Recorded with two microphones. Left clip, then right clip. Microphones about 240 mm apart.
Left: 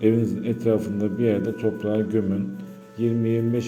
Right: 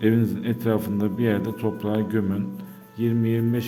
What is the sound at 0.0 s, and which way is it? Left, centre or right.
A man's voice, right.